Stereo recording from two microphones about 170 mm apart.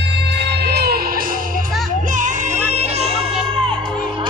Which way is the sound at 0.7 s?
70° right (ahead or behind).